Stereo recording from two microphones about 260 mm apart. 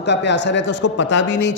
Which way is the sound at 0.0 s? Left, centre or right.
Left.